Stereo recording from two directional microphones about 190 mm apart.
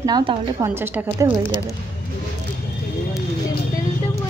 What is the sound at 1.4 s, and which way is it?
Speech, 20° left (ahead or behind).